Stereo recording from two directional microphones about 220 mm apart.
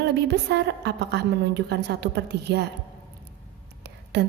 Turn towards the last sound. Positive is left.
turn(degrees=-50)  # may be behind; listen again after turning